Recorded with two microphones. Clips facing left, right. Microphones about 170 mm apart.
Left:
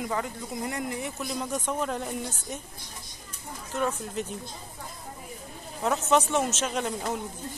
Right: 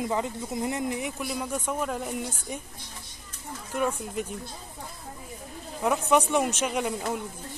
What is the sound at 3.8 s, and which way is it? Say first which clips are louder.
Speech: right 1 dB; 10° right (ahead or behind).